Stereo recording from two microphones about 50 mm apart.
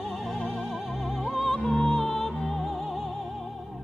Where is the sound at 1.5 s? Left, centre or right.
Centre.